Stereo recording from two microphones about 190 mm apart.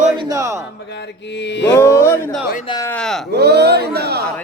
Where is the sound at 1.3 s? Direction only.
65° left (ahead or behind).